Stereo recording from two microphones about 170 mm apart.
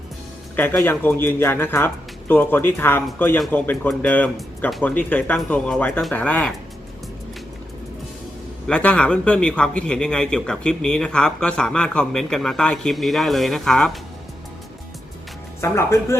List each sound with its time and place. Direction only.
0.5 s speech: 10° left (ahead or behind)
8.6 s a man's voice: 5° left (ahead or behind)
15.6 s speech: 15° left (ahead or behind)